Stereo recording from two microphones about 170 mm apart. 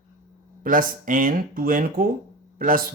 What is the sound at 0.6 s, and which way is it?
Speech, 55° right (ahead or behind).